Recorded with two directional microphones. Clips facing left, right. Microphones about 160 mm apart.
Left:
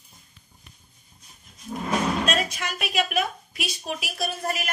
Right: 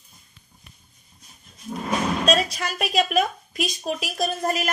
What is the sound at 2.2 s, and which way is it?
A woman's voice, 35° right (ahead or behind).